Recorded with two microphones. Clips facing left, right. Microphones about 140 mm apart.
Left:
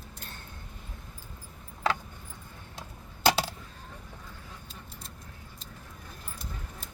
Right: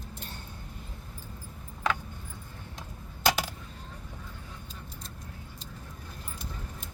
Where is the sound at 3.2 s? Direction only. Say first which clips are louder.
Left 2 dB; 30° left (ahead or behind).